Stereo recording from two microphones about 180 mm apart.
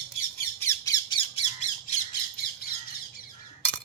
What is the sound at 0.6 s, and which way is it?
Squawk, 20° left (ahead or behind).